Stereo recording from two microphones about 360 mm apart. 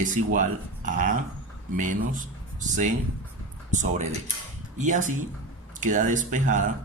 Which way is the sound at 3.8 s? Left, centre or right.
Centre.